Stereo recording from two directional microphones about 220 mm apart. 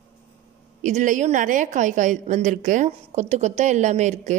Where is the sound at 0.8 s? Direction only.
35° right (ahead or behind).